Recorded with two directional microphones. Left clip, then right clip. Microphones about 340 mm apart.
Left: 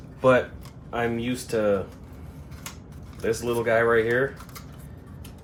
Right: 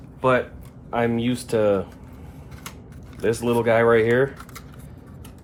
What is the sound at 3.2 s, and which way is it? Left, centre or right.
Speech, centre.